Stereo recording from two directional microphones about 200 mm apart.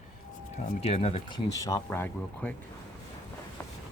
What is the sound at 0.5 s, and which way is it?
Speech, 30° left (ahead or behind).